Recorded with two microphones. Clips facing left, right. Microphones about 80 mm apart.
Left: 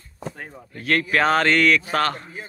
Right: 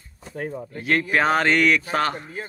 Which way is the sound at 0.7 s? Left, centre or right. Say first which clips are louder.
Left 1 dB; centre.